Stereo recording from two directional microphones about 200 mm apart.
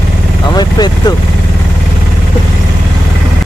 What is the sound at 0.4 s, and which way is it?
Vehicle, 20° left (ahead or behind).